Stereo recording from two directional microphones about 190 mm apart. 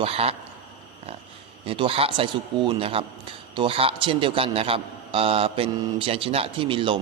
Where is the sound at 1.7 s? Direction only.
30° right (ahead or behind).